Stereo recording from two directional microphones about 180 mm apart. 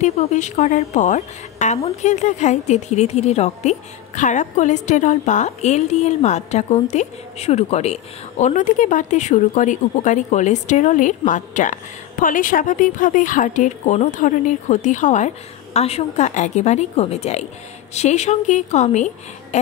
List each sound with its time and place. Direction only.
0.0 s a woman's voice: 40° left (ahead or behind)